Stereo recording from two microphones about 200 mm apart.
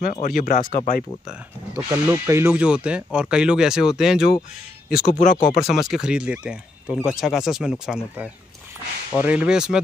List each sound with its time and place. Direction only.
0.0 s speech: 40° left (ahead or behind)
1.9 s speech: 15° right (ahead or behind)
4.8 s speech: 50° left (ahead or behind)
5.7 s speech: centre (ahead or behind)